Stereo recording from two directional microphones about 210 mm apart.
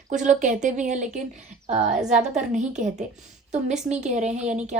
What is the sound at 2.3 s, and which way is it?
Speech, 35° right (ahead or behind).